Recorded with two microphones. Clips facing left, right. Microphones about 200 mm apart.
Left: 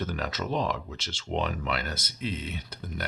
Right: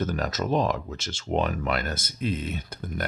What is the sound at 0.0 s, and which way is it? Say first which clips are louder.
Speech: right 4 dB; 45° right (ahead or behind).